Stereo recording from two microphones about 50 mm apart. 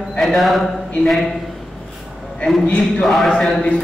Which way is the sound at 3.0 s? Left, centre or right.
Centre.